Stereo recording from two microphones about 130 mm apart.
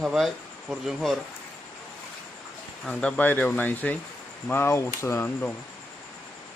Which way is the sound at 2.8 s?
5° left (ahead or behind).